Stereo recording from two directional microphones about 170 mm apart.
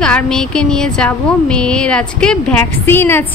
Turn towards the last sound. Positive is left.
turn(degrees=10)  # may be behind; listen again after turning